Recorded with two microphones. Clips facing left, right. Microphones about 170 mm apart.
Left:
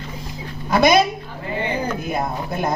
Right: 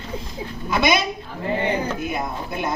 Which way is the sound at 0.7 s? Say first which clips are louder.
Left 5 dB; 40° left (ahead or behind).